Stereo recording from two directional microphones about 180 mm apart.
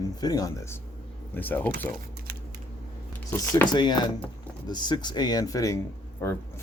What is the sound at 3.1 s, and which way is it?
A man's voice, 15° left (ahead or behind).